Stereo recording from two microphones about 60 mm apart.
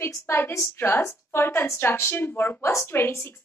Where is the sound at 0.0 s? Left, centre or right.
Left.